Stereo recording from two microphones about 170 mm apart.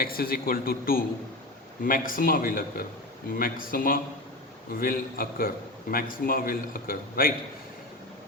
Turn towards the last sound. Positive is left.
turn(degrees=55)  # may be behind; listen again after turning